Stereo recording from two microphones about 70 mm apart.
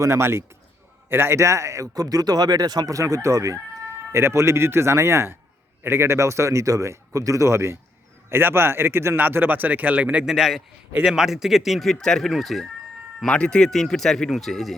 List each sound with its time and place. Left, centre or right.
0.0 s speech: right
3.8 s speech: right; by 10.2 s centre
10.2 s speech: centre
13.2 s speech: centre